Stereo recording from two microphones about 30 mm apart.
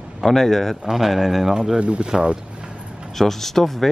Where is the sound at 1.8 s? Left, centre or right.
Right.